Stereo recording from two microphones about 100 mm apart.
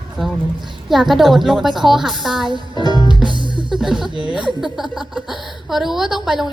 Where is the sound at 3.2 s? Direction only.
50° right (ahead or behind).